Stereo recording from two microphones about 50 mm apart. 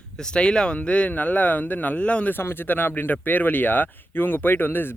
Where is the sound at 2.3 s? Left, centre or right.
Left.